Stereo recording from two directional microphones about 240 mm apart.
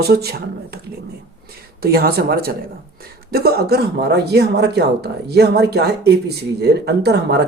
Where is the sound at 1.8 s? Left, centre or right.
Right.